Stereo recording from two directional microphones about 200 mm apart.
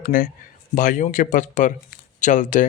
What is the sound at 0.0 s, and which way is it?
Speech, 45° left (ahead or behind).